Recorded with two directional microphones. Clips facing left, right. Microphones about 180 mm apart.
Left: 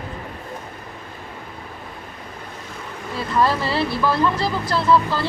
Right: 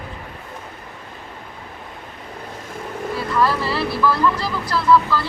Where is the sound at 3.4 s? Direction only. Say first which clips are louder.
Left 1 dB; 25° left (ahead or behind).